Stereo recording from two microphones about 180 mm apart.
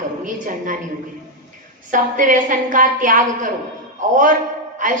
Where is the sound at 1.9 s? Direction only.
45° right (ahead or behind).